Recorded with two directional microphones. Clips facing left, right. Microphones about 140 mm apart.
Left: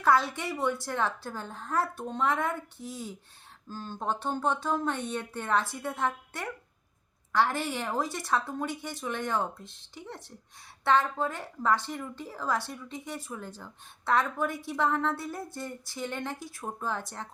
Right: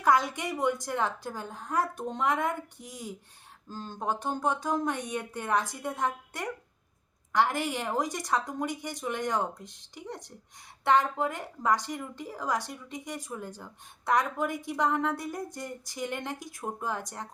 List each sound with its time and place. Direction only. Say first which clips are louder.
0.0 s a woman's voice: even; 15° right (ahead or behind)